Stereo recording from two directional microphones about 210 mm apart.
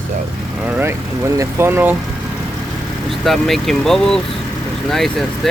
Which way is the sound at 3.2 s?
Centre (ahead or behind).